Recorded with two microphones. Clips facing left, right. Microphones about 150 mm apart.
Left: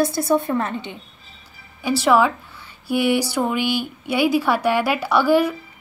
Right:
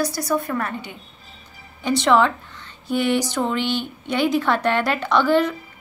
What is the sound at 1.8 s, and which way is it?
A woman's voice, 5° left (ahead or behind).